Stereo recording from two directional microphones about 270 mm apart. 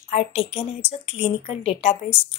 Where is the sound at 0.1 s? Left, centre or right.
Left.